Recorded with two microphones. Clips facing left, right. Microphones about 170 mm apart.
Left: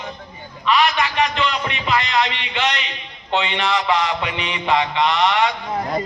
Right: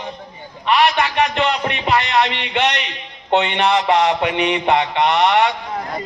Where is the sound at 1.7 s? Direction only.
55° right (ahead or behind).